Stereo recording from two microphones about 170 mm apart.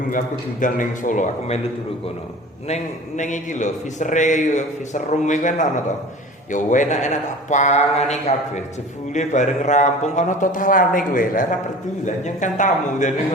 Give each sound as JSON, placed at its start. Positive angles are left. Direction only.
{"t": 0.6, "sound": "a man's voice", "side_deg": 50}
{"t": 2.6, "sound": "a man's voice", "side_deg": 40}